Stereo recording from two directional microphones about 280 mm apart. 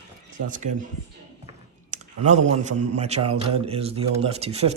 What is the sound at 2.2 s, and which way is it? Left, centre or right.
A man's voice, right.